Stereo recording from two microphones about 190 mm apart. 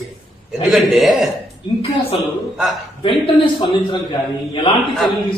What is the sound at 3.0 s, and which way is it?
Speech, 25° left (ahead or behind).